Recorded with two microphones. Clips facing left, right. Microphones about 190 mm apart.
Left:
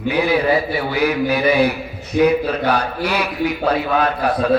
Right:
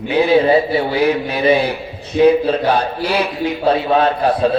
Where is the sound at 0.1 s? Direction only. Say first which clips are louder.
Right 4 dB; 25° right (ahead or behind).